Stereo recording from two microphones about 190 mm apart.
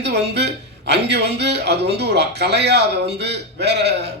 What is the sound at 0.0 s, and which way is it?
A man's voice, 60° right (ahead or behind).